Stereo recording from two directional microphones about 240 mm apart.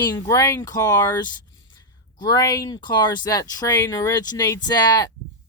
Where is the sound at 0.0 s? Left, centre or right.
Centre.